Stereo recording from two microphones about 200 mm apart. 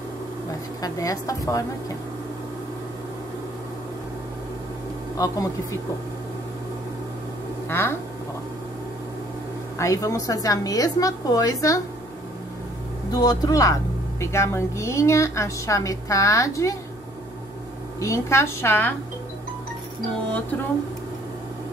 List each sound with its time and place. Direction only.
0.8 s a woman's voice: 15° left (ahead or behind)
5.1 s a woman's voice: 15° left (ahead or behind)
7.6 s speech: 10° left (ahead or behind)
9.8 s a woman's voice: 15° left (ahead or behind)
13.1 s a woman's voice: 20° left (ahead or behind)
18.0 s a woman's voice: 15° left (ahead or behind)